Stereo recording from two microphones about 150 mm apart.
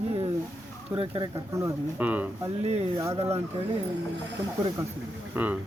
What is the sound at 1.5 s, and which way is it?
Speech, 15° right (ahead or behind).